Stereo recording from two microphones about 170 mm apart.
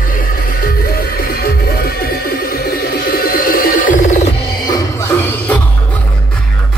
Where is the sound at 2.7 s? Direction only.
60° left (ahead or behind).